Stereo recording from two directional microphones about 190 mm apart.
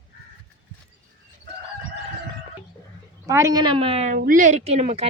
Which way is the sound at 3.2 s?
15° right (ahead or behind).